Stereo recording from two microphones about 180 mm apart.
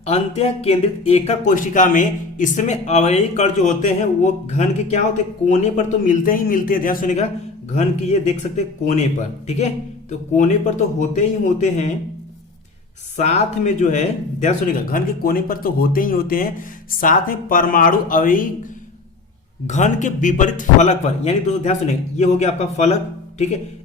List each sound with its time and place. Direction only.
0.0 s speech: 35° left (ahead or behind)
13.1 s speech: 40° left (ahead or behind)
19.6 s speech: 40° left (ahead or behind)